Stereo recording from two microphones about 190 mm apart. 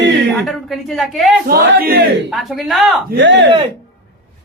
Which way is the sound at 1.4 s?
55° right (ahead or behind).